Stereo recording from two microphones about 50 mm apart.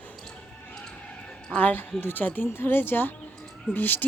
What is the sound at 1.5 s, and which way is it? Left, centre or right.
Speech, left.